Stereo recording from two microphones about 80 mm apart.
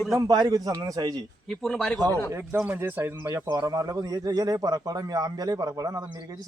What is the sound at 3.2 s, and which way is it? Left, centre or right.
A man's voice, right.